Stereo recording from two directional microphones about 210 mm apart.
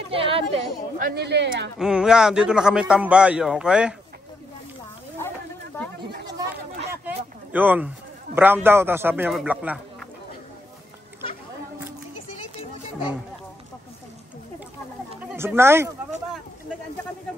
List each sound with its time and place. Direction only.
0.1 s chatter: 25° right (ahead or behind)
0.9 s speech: 45° right (ahead or behind)
1.8 s a man's voice: 5° right (ahead or behind)
7.5 s a man's voice: 10° right (ahead or behind)
15.3 s a man's voice: 10° right (ahead or behind)